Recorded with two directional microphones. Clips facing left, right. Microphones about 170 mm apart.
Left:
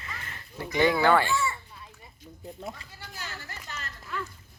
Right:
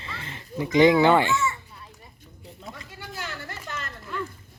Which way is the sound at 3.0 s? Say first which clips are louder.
Right 6 dB; 55° right (ahead or behind).